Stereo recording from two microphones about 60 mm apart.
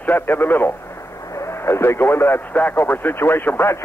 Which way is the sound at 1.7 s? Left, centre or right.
Left.